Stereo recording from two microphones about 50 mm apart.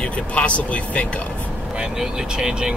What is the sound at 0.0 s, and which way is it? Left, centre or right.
Speech, left.